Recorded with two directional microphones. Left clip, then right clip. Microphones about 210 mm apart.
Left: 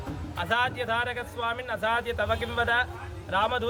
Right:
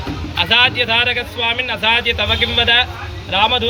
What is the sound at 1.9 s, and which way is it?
Speech, 45° left (ahead or behind).